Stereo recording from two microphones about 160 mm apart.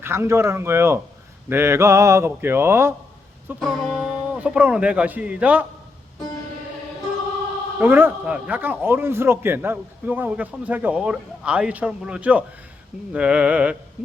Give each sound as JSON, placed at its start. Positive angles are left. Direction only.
{"t": 0.0, "sound": "speech", "side_deg": -15}
{"t": 3.6, "sound": "speech", "side_deg": 0}
{"t": 7.8, "sound": "speech", "side_deg": -10}